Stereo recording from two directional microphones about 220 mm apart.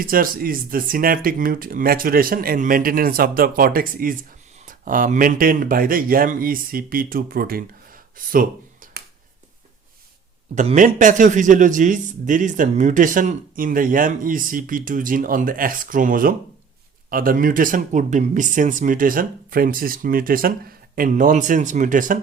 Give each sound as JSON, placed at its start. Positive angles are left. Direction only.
{"t": 0.0, "sound": "speech", "side_deg": -40}
{"t": 10.5, "sound": "speech", "side_deg": -35}